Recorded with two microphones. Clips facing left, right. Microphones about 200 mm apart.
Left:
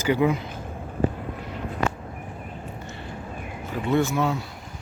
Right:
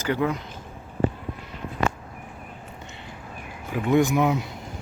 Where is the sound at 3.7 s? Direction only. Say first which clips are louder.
Right 3 dB; 15° right (ahead or behind).